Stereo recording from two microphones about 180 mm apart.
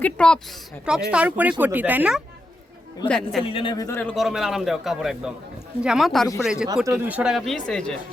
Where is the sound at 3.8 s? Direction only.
10° left (ahead or behind).